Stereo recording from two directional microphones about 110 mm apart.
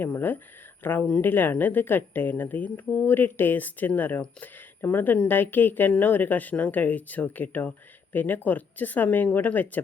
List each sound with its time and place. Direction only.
0.0 s speech: 15° left (ahead or behind)